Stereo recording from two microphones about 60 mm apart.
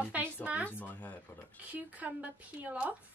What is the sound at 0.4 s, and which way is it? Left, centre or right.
Speech, right.